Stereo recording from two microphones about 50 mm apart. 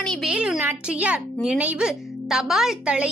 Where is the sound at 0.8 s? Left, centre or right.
Right.